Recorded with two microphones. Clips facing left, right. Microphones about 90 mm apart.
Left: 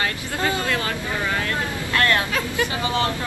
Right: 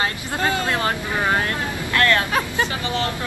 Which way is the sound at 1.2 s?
55° right (ahead or behind).